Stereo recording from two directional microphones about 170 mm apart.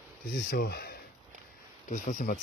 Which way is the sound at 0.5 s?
65° left (ahead or behind).